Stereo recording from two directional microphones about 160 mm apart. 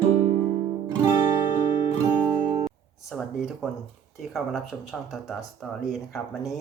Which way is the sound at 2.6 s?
Centre (ahead or behind).